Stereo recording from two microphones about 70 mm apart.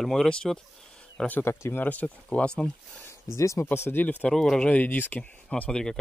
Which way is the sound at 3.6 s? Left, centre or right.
Left.